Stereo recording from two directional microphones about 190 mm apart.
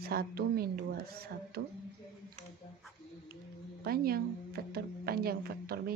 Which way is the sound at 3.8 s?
55° right (ahead or behind).